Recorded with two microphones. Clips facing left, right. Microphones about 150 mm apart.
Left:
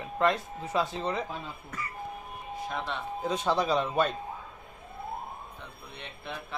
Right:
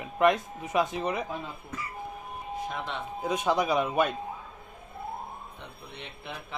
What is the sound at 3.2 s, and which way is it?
Speech, 15° right (ahead or behind).